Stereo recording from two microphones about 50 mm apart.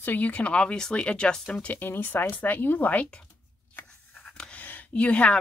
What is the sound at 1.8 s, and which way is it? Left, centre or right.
Speech, left.